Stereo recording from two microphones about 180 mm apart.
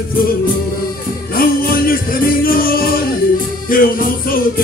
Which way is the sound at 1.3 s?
55° left (ahead or behind).